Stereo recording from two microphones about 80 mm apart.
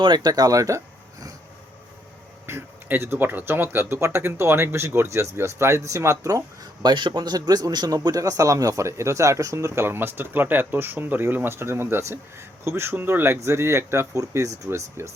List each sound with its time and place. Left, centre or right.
0.0 s speech: right
2.5 s speech: right
6.8 s speech: right